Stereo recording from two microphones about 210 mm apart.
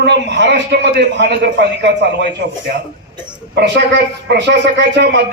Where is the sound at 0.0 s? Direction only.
55° right (ahead or behind).